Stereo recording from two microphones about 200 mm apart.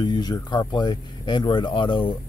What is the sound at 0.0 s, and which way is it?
Speech, 20° left (ahead or behind).